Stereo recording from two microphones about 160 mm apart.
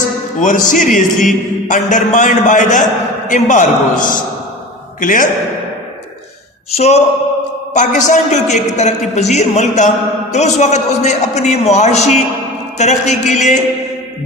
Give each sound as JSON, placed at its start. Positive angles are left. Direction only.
{"t": 0.3, "sound": "a man's voice", "side_deg": 55}
{"t": 6.7, "sound": "a sound", "side_deg": 40}
{"t": 7.7, "sound": "a man's voice", "side_deg": 50}